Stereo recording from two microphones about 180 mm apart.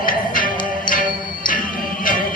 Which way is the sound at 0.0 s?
50° left (ahead or behind).